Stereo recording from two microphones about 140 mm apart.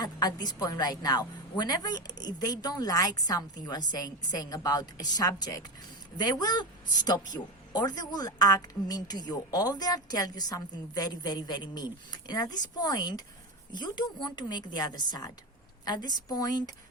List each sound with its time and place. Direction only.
0.0 s a woman's voice: 30° left (ahead or behind)